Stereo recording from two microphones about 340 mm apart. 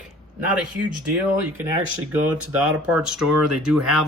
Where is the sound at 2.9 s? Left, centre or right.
Centre.